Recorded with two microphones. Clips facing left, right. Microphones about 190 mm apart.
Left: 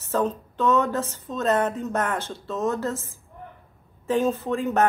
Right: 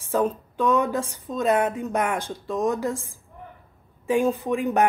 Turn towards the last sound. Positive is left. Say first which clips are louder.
# right 1 dB
turn(degrees=-15)  # may be behind; listen again after turning